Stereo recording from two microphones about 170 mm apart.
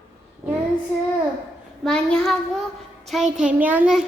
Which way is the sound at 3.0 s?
Centre (ahead or behind).